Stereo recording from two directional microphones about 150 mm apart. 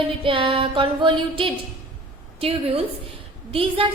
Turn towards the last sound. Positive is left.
turn(degrees=-40)  # may be behind; listen again after turning